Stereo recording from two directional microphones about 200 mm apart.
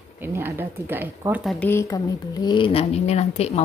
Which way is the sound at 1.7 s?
15° left (ahead or behind).